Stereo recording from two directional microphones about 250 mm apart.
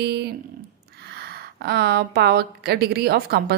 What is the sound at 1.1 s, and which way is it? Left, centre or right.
A woman's voice, right.